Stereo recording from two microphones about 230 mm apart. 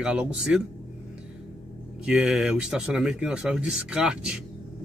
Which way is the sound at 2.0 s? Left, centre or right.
Centre.